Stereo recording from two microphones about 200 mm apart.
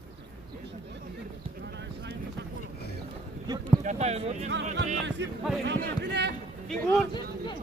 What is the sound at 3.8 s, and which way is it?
Speech, 35° right (ahead or behind).